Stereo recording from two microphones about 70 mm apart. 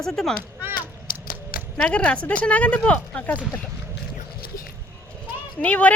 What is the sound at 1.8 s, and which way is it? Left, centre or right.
Speech, centre.